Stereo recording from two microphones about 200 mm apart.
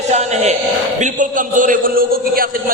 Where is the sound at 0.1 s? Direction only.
35° right (ahead or behind).